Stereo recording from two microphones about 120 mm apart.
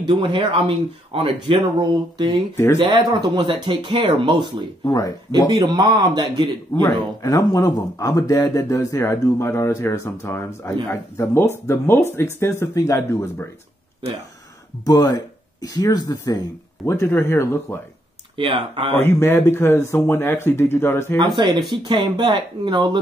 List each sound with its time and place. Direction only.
0.0 s speech: 45° right (ahead or behind)
2.5 s speech: 20° left (ahead or behind)
3.1 s speech: 35° right (ahead or behind)
4.8 s speech: 30° left (ahead or behind)
5.5 s speech: 35° right (ahead or behind)
7.2 s speech: 30° left (ahead or behind)
14.9 s speech: 30° left (ahead or behind)
18.3 s speech: 45° right (ahead or behind)
18.9 s speech: 20° left (ahead or behind)
21.8 s speech: 40° right (ahead or behind)